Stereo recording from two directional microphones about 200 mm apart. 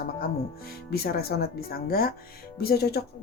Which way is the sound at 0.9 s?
50° left (ahead or behind).